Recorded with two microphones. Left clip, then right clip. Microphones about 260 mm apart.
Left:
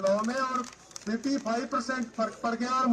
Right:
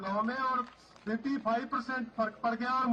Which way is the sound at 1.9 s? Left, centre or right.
Right.